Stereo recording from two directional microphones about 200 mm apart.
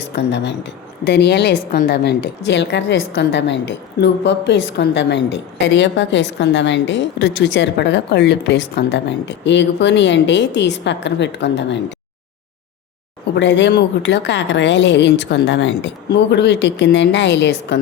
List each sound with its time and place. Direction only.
0.2 s a woman's voice: 60° left (ahead or behind)
13.3 s a woman's voice: 60° left (ahead or behind)